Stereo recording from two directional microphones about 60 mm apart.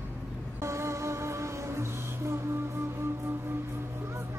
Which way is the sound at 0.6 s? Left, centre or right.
Right.